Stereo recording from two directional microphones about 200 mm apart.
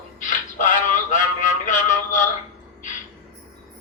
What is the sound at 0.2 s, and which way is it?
Music, 40° left (ahead or behind).